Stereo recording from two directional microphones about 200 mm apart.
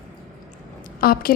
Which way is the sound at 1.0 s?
45° left (ahead or behind).